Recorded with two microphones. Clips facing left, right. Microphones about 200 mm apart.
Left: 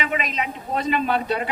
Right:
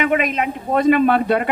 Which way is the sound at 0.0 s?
55° right (ahead or behind).